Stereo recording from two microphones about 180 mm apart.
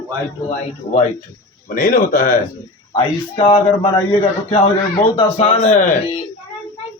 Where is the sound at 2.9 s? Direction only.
30° left (ahead or behind).